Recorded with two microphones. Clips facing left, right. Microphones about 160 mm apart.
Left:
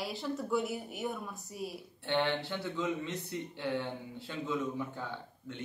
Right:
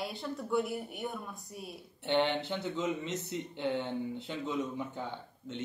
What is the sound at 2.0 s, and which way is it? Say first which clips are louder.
Speech: right 2 dB; 20° right (ahead or behind).